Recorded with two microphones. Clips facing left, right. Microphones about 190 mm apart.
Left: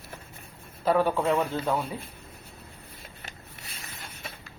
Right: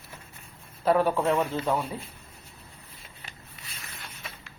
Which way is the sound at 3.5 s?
60° left (ahead or behind).